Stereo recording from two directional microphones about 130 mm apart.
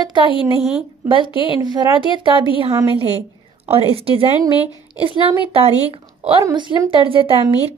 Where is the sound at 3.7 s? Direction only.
45° right (ahead or behind).